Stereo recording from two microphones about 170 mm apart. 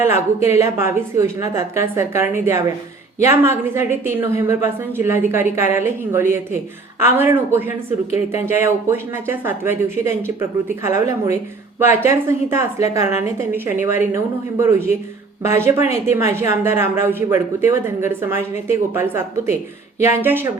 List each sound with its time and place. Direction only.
0.4 s a woman's voice: 15° right (ahead or behind)